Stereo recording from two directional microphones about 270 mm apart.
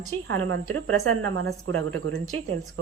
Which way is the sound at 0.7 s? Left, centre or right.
Right.